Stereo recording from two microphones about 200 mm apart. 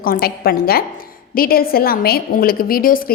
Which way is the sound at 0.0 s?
50° left (ahead or behind).